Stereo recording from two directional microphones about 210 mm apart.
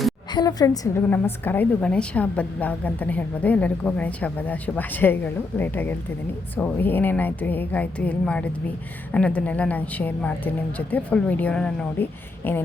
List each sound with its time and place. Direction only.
0.3 s a woman's voice: 15° left (ahead or behind)